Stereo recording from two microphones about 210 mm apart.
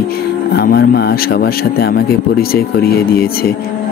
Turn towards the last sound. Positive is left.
turn(degrees=45)  # may be behind; listen again after turning